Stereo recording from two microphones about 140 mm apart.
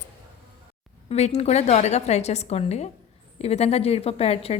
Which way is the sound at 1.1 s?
50° left (ahead or behind).